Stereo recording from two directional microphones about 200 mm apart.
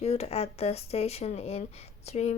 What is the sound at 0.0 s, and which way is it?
Speech, 30° left (ahead or behind).